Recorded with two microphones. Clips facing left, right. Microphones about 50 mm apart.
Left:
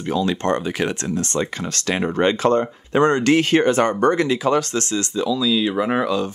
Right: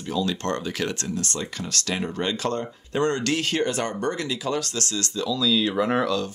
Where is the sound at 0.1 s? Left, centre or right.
Left.